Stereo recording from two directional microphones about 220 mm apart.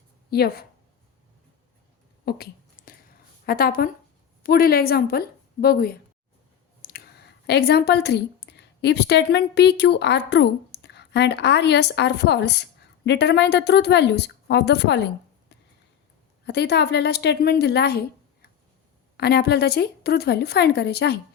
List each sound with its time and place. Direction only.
0.3 s a woman's voice: 45° left (ahead or behind)
2.2 s a sound: 45° left (ahead or behind)
3.4 s a woman's voice: 45° left (ahead or behind)
19.1 s a woman's voice: 45° left (ahead or behind)